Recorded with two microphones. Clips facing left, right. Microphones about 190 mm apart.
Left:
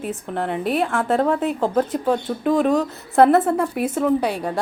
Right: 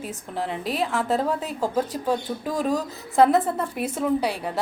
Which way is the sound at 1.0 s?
75° left (ahead or behind).